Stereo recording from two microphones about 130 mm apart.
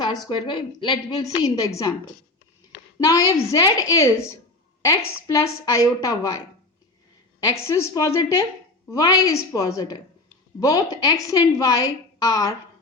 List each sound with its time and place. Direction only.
0.3 s a woman's voice: 40° left (ahead or behind)
1.6 s a woman's voice: 25° left (ahead or behind)
3.0 s a woman's voice: 25° left (ahead or behind)
7.4 s a woman's voice: 20° left (ahead or behind)